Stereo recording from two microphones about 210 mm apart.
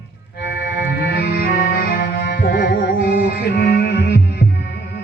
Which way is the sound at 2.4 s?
50° left (ahead or behind).